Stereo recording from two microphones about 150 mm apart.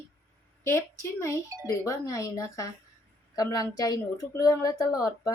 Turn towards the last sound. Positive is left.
turn(degrees=25)  # may be behind; listen again after turning